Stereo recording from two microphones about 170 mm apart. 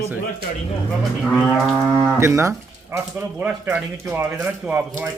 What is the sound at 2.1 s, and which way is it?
Speech, 15° right (ahead or behind).